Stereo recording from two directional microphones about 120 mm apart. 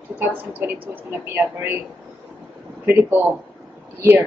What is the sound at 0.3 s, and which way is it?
Speech, 15° right (ahead or behind).